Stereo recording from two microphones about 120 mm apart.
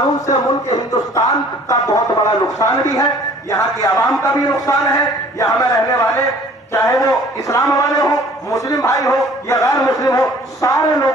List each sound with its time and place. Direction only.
0.3 s a man's voice: 30° left (ahead or behind)